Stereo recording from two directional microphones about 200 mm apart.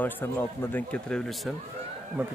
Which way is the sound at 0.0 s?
10° left (ahead or behind).